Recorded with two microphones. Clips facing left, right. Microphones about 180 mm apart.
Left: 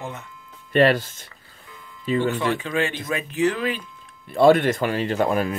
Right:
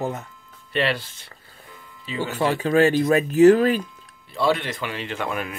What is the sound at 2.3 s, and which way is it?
Speech, 40° right (ahead or behind).